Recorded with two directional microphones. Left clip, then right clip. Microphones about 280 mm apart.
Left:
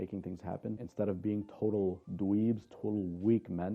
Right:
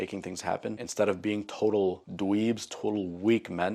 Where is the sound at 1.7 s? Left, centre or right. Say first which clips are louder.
Right 6 dB; right.